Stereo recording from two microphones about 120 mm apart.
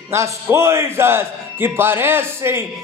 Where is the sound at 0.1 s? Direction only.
25° right (ahead or behind).